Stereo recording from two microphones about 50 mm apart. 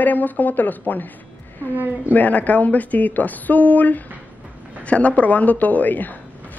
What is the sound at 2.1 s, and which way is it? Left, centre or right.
A woman's voice, left.